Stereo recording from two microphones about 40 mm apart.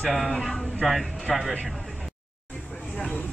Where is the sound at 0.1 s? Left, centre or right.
Centre.